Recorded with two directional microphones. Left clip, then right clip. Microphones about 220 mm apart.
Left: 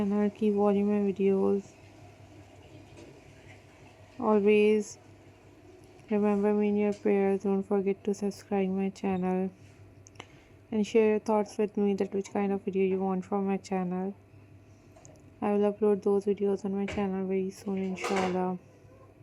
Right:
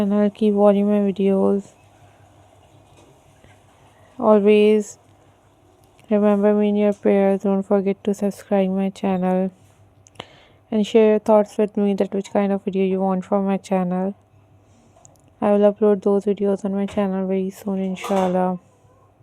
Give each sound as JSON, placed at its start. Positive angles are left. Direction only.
{"t": 0.0, "sound": "speech", "side_deg": -50}
{"t": 4.2, "sound": "speech", "side_deg": -50}
{"t": 6.1, "sound": "speech", "side_deg": -50}
{"t": 15.4, "sound": "speech", "side_deg": -50}